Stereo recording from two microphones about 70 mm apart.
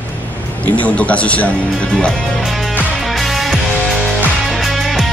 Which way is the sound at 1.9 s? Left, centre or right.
Centre.